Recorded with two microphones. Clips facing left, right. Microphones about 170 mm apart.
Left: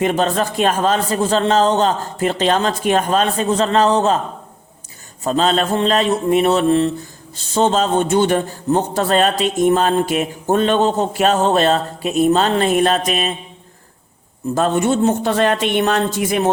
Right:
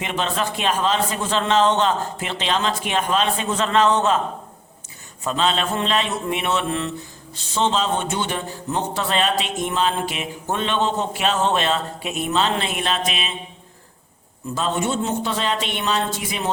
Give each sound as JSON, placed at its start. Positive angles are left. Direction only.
{"t": 0.0, "sound": "a man's voice", "side_deg": 45}
{"t": 5.2, "sound": "a man's voice", "side_deg": 40}
{"t": 14.5, "sound": "speech", "side_deg": 50}